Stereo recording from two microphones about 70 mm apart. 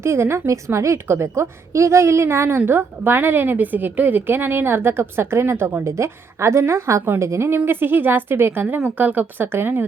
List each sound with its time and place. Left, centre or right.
0.0 s a woman's voice: right